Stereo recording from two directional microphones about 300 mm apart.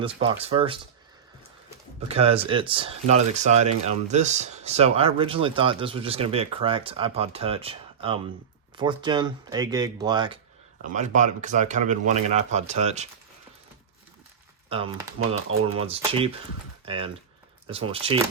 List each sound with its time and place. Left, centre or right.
0.0 s speech: centre
2.0 s speech: right
14.7 s speech: centre